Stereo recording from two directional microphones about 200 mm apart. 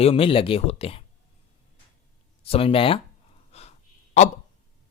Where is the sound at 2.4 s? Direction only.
30° left (ahead or behind).